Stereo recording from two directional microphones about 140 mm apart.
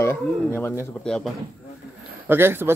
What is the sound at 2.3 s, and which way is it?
Speech, 15° right (ahead or behind).